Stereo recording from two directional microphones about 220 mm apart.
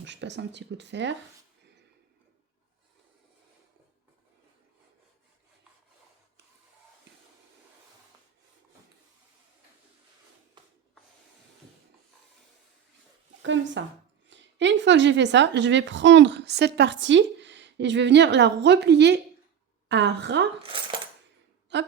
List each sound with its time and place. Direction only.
0.0 s a woman's voice: 55° right (ahead or behind)
10.6 s a sound: 20° right (ahead or behind)
13.4 s a woman's voice: 55° right (ahead or behind)
20.6 s cutlery: 25° right (ahead or behind)
21.7 s a woman's voice: 50° right (ahead or behind)